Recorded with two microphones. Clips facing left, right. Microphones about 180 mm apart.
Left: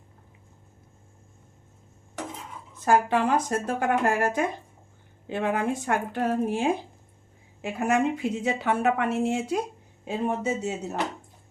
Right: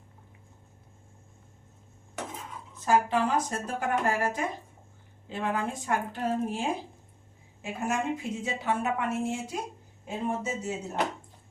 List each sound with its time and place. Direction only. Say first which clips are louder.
2.8 s a woman's voice: left 3 dB; 65° left (ahead or behind)